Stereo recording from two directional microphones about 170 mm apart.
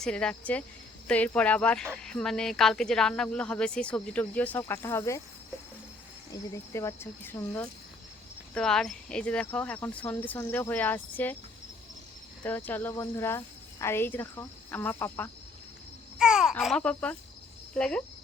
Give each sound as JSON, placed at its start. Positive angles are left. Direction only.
{"t": 0.0, "sound": "speech", "side_deg": 5}
{"t": 6.5, "sound": "speech", "side_deg": 15}
{"t": 12.4, "sound": "speech", "side_deg": 10}
{"t": 16.1, "sound": "speech", "side_deg": -5}